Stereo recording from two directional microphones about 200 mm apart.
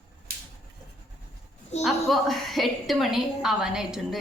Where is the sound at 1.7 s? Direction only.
35° left (ahead or behind).